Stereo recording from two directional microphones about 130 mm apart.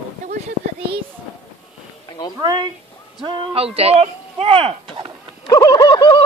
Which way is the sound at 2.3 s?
35° right (ahead or behind).